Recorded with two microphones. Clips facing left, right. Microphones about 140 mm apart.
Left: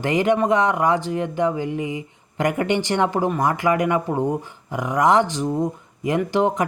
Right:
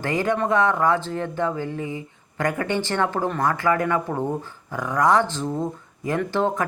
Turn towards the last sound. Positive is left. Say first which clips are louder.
# left 3 dB
turn(degrees=20)  # may be behind; listen again after turning